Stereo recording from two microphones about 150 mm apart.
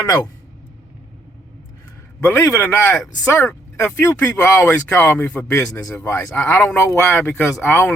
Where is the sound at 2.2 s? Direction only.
15° left (ahead or behind).